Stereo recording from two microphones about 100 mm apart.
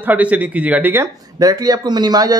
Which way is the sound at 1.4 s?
40° right (ahead or behind).